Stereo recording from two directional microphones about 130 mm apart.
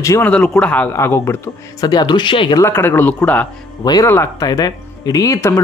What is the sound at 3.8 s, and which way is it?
Speech, 30° left (ahead or behind).